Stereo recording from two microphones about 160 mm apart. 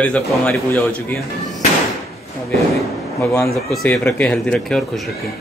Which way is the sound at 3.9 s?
10° left (ahead or behind).